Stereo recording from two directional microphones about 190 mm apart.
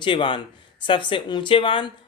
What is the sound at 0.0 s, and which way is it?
Speech, 25° left (ahead or behind).